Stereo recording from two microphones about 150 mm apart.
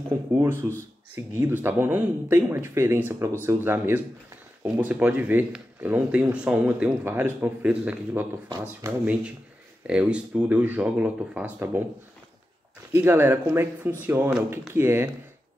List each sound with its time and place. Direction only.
0.3 s speech: 15° right (ahead or behind)
8.5 s speech: 25° right (ahead or behind)
9.8 s speech: 10° right (ahead or behind)
12.9 s speech: 15° right (ahead or behind)